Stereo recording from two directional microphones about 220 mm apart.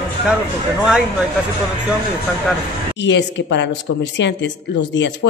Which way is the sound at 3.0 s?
55° left (ahead or behind).